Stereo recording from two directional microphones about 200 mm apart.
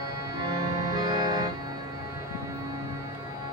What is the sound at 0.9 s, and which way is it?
Music, 20° right (ahead or behind).